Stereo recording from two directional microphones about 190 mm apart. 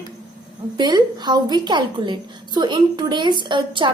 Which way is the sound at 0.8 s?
20° right (ahead or behind).